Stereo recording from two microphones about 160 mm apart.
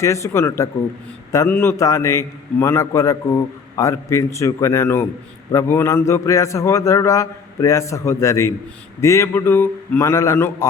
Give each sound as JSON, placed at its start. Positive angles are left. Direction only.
{"t": 0.0, "sound": "a man's voice", "side_deg": 20}